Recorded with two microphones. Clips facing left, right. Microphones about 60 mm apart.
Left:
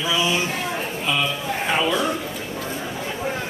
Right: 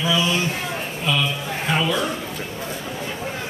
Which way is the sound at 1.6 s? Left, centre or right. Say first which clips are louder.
Even; centre.